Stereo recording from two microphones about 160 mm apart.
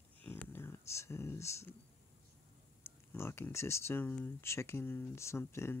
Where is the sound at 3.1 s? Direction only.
15° left (ahead or behind).